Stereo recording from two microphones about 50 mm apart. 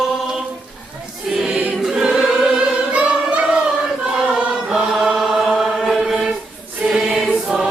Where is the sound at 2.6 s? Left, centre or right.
Right.